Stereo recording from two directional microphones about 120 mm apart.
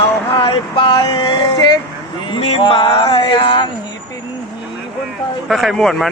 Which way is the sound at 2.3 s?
50° left (ahead or behind).